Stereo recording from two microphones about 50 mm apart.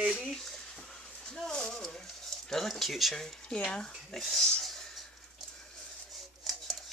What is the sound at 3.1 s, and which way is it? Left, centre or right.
Speech, centre.